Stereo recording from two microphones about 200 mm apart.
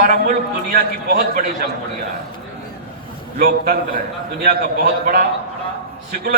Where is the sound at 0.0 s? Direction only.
40° right (ahead or behind).